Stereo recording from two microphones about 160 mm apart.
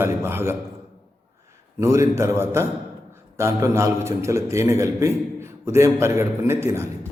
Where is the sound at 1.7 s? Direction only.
20° right (ahead or behind).